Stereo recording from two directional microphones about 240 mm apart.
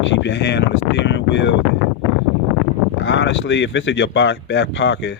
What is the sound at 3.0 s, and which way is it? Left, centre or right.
Speech, left.